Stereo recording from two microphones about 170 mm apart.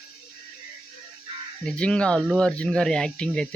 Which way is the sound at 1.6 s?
5° left (ahead or behind).